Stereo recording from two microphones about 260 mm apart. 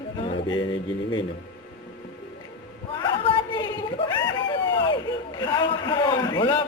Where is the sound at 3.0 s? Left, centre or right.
Centre.